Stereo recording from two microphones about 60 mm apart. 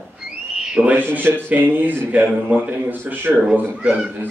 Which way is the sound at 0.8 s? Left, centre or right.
Right.